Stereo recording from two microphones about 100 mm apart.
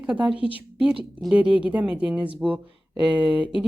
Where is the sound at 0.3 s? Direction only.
60° left (ahead or behind).